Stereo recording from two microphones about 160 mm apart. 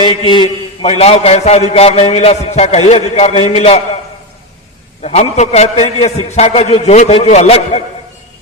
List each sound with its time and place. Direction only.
0.0 s a man's voice: 30° left (ahead or behind)
5.0 s a man's voice: 45° left (ahead or behind)